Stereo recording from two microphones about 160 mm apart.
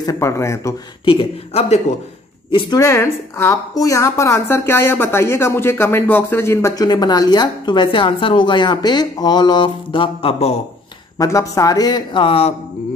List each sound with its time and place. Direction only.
0.0 s a woman's voice: 20° left (ahead or behind)
1.0 s speech: 40° left (ahead or behind)
2.5 s a woman's voice: 20° left (ahead or behind)
11.1 s a woman's voice: 20° left (ahead or behind); by 12.5 s 35° left (ahead or behind)